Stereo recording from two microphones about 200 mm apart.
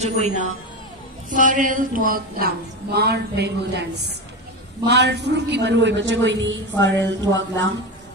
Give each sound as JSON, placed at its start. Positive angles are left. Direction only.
{"t": 0.0, "sound": "a man's voice", "side_deg": -35}